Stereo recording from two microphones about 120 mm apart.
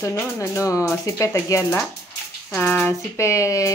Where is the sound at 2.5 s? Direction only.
15° left (ahead or behind).